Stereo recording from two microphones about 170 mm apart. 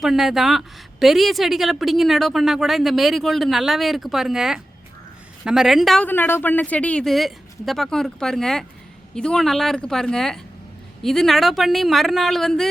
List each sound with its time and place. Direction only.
0.0 s a woman's voice: centre (ahead or behind)